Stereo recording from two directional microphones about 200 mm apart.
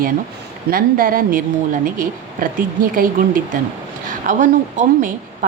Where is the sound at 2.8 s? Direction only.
45° right (ahead or behind).